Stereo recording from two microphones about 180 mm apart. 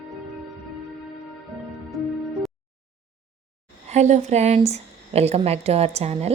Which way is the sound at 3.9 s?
40° right (ahead or behind).